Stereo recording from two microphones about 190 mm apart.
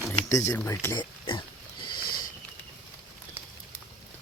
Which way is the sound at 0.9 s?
25° left (ahead or behind).